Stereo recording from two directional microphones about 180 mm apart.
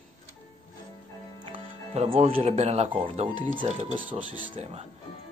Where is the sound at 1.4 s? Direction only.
35° right (ahead or behind).